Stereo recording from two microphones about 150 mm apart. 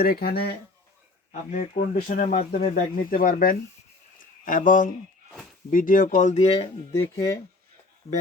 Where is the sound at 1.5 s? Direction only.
55° left (ahead or behind).